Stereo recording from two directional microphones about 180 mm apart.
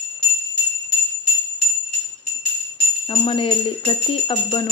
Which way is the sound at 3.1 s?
30° left (ahead or behind).